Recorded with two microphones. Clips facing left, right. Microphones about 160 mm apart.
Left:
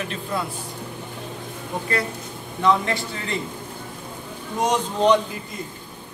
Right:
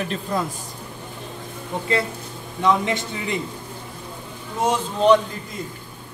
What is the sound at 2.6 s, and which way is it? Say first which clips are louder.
Speech: even; 20° right (ahead or behind).